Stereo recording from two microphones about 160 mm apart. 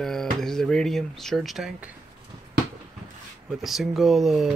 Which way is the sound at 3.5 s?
Centre (ahead or behind).